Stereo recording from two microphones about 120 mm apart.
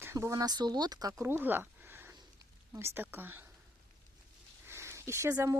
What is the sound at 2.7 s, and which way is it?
Speech, 20° right (ahead or behind).